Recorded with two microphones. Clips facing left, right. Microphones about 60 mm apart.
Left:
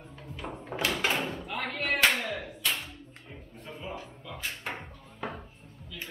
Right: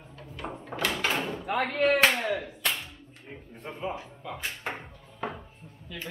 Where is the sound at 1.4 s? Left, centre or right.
Right.